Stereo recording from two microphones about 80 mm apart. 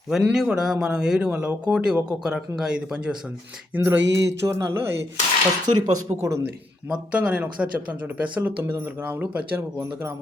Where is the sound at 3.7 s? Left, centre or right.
Right.